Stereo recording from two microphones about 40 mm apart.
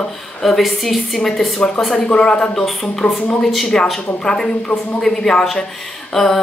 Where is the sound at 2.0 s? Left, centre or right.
Left.